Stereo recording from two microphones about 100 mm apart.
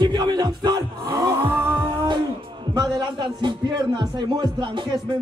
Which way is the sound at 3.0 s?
50° right (ahead or behind).